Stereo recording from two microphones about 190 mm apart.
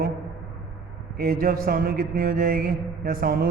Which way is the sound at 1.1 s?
50° right (ahead or behind).